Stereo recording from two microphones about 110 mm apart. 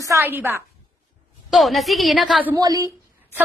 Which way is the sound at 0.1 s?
25° right (ahead or behind).